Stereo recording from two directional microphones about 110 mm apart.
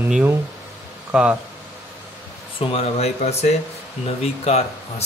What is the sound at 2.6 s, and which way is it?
Speech, 60° left (ahead or behind).